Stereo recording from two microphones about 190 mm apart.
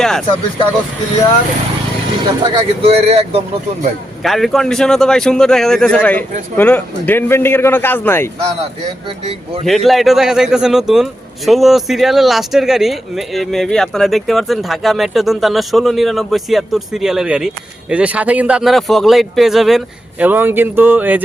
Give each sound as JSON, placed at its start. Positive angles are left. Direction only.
{"t": 0.0, "sound": "a man's voice", "side_deg": 0}
{"t": 2.4, "sound": "speech", "side_deg": -30}
{"t": 4.2, "sound": "a man's voice", "side_deg": 0}
{"t": 9.0, "sound": "speech", "side_deg": -30}
{"t": 9.6, "sound": "a man's voice", "side_deg": 0}